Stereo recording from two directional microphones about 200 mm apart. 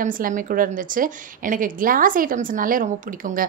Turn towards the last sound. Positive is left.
turn(degrees=-45)  # may be behind; listen again after turning